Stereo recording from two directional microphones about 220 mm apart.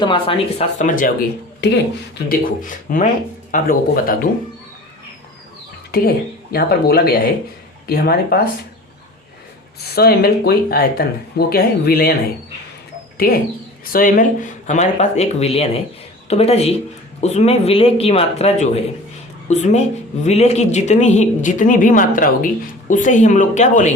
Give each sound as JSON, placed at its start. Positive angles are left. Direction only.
{"t": 0.0, "sound": "speech", "side_deg": 20}
{"t": 0.8, "sound": "speech", "side_deg": 35}
{"t": 2.1, "sound": "speech", "side_deg": 40}
{"t": 5.9, "sound": "speech", "side_deg": 45}
{"t": 9.9, "sound": "speech", "side_deg": 45}
{"t": 13.1, "sound": "speech", "side_deg": 45}